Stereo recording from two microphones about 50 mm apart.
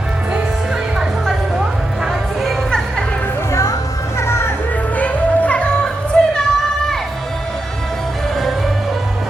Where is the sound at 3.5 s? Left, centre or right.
Left.